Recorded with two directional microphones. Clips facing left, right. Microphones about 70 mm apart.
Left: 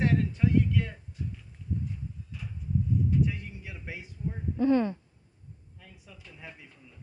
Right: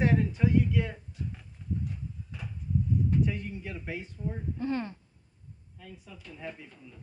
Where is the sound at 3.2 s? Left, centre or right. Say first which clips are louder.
Even; centre.